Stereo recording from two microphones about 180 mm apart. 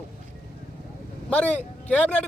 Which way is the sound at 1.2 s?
5° left (ahead or behind).